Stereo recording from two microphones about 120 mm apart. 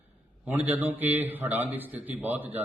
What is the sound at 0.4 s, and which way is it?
A man's voice, 15° right (ahead or behind).